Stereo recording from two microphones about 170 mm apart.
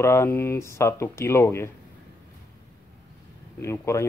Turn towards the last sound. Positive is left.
turn(degrees=15)  # may be behind; listen again after turning